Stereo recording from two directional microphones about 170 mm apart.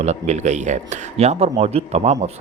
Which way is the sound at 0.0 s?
40° right (ahead or behind).